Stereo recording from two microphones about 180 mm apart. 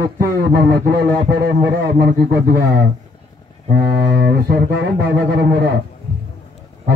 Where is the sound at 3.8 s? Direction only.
65° right (ahead or behind).